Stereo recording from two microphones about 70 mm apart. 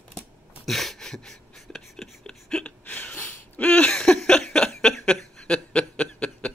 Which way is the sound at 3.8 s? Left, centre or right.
Centre.